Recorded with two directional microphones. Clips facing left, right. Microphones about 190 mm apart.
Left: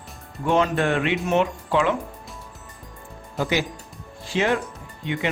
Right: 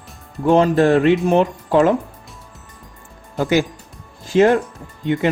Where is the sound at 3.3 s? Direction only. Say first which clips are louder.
Right 7 dB; 45° right (ahead or behind).